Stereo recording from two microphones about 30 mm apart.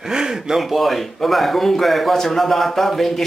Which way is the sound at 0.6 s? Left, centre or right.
Centre.